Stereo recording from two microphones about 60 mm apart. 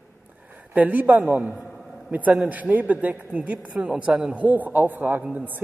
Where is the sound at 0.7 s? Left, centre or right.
Right.